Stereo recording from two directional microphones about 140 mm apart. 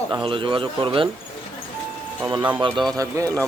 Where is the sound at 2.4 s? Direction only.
15° right (ahead or behind).